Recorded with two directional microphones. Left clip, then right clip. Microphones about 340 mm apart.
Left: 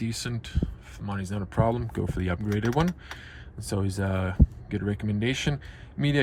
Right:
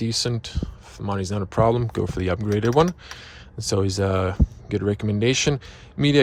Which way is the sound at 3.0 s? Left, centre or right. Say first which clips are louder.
Right 3 dB; centre.